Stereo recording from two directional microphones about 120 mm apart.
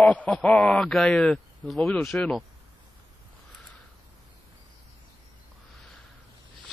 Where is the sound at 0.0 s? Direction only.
10° left (ahead or behind).